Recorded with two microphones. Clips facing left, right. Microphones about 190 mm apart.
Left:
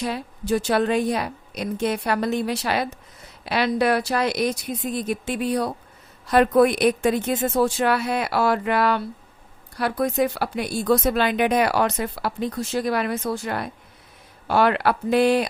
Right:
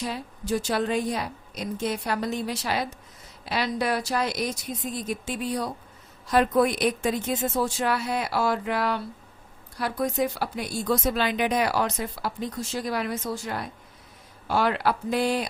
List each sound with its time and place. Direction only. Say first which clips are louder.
0.0 s a woman's voice: left 4 dB; 65° left (ahead or behind)